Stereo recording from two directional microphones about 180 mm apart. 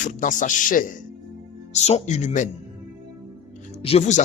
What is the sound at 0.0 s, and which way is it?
A man's voice, 45° left (ahead or behind).